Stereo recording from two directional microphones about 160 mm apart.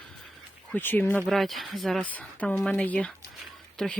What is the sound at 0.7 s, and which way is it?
Speech, 10° left (ahead or behind).